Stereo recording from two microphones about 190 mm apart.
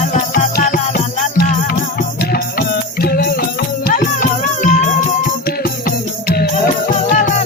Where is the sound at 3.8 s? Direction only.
45° left (ahead or behind).